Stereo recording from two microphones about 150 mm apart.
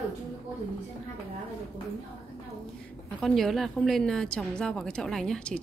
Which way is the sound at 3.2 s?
Centre (ahead or behind).